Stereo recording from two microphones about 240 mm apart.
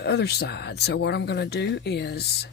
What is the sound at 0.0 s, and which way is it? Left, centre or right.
Speech, left.